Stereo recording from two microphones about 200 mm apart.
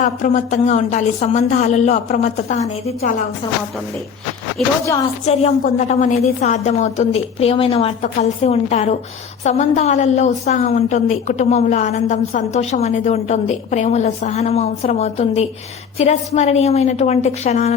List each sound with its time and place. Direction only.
0.0 s a woman's voice: 35° left (ahead or behind)
4.6 s speech: centre (ahead or behind)
5.6 s a woman's voice: 40° left (ahead or behind)